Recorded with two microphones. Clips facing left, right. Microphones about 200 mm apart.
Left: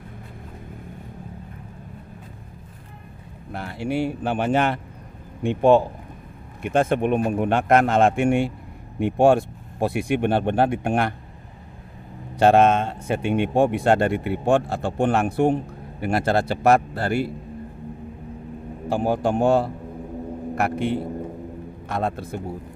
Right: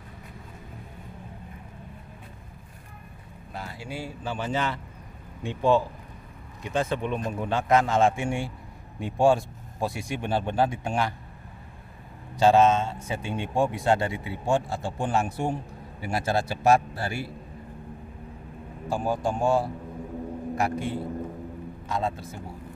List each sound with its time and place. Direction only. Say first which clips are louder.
3.5 s a man's voice: left 11 dB; 65° left (ahead or behind)
12.4 s a man's voice: left 3 dB; 60° left (ahead or behind)
18.9 s a man's voice: left 5 dB; 65° left (ahead or behind)